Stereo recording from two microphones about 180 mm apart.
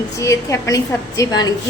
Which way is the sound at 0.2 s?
15° left (ahead or behind).